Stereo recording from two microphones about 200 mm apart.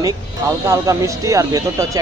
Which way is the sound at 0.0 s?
15° right (ahead or behind).